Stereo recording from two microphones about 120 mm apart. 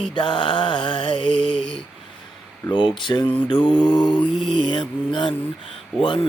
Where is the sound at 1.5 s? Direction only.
90° right.